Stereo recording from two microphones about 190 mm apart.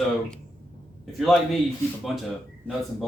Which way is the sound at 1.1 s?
Centre (ahead or behind).